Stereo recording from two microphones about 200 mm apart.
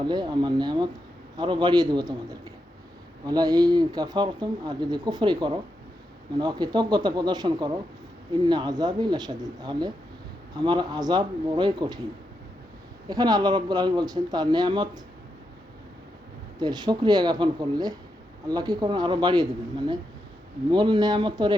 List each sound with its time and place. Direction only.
0.0 s speech: 20° right (ahead or behind)
13.1 s speech: 20° right (ahead or behind)
16.6 s speech: 20° right (ahead or behind)
20.7 s speech: 20° right (ahead or behind)